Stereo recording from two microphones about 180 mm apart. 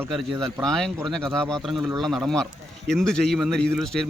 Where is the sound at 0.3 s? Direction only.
25° right (ahead or behind).